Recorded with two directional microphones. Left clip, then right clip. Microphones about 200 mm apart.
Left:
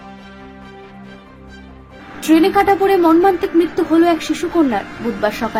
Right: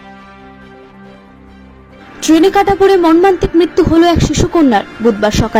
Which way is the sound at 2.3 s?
30° right (ahead or behind).